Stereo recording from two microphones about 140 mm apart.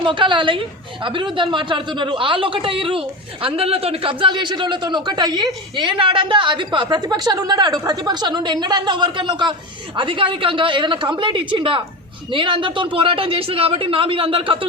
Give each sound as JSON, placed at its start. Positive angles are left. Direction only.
{"t": 0.0, "sound": "speech", "side_deg": -35}